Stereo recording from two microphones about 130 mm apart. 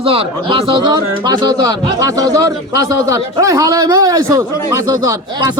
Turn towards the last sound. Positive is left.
turn(degrees=-25)  # may be behind; listen again after turning